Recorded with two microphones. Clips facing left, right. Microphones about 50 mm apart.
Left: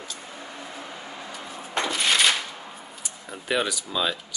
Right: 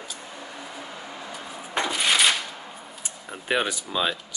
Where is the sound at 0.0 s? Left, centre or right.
Centre.